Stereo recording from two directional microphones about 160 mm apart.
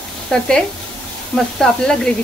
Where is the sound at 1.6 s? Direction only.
5° left (ahead or behind).